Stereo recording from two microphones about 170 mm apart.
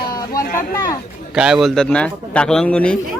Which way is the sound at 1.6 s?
5° left (ahead or behind).